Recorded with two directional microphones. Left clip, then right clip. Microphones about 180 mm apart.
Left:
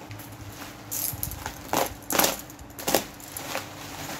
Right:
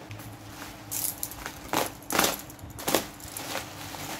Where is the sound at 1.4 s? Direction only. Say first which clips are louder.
Left 3 dB; centre (ahead or behind).